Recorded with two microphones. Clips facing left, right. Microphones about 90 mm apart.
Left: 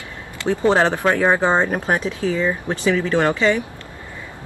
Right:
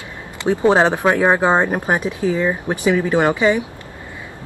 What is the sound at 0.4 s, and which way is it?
Speech, 15° right (ahead or behind).